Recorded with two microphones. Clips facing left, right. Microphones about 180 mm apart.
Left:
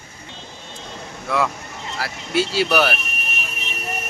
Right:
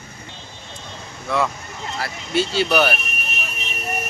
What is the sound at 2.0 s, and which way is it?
Speech, 5° left (ahead or behind).